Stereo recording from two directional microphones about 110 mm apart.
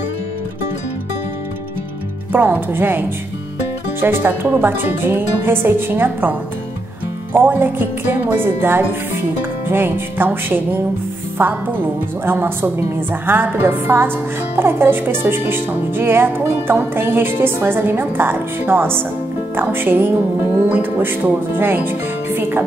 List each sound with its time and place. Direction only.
2.3 s a woman's voice: 15° right (ahead or behind)
7.3 s a woman's voice: 20° right (ahead or behind)